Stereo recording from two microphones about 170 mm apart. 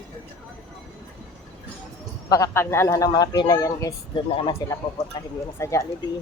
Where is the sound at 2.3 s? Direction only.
15° left (ahead or behind).